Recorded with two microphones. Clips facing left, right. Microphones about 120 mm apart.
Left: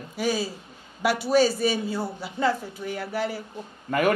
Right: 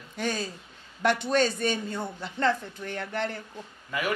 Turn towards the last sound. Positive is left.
turn(degrees=55)  # may be behind; listen again after turning